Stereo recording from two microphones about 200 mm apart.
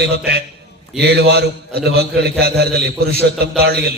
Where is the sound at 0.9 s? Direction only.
55° right (ahead or behind).